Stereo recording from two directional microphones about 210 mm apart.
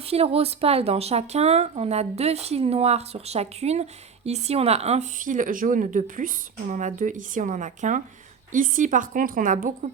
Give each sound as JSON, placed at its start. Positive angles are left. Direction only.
{"t": 0.0, "sound": "speech", "side_deg": -30}